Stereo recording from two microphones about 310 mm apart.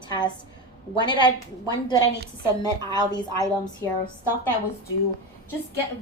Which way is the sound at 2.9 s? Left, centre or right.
Centre.